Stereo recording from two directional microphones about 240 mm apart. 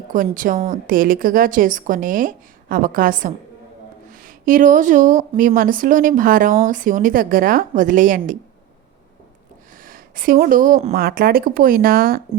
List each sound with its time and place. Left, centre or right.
0.1 s a woman's voice: right
9.7 s a woman's voice: right